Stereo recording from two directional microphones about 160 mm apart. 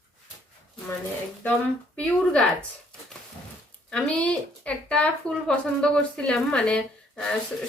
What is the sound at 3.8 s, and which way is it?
A woman's voice, 5° left (ahead or behind).